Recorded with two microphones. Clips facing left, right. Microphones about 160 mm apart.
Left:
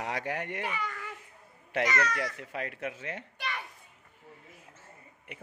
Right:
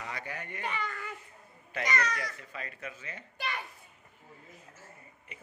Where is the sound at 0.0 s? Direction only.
75° left (ahead or behind).